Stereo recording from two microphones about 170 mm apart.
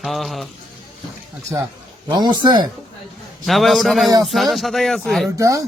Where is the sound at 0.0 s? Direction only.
Centre (ahead or behind).